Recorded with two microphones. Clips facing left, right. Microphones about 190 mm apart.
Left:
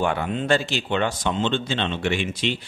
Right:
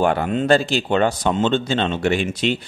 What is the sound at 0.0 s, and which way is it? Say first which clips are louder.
Speech: right 5 dB; 40° right (ahead or behind).